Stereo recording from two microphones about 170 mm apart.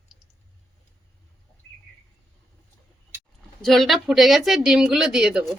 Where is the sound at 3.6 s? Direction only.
Centre (ahead or behind).